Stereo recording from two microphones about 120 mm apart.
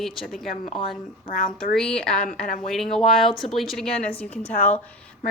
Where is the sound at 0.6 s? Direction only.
50° left (ahead or behind).